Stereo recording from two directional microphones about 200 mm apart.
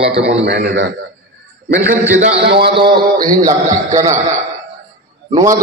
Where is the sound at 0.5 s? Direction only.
60° right (ahead or behind).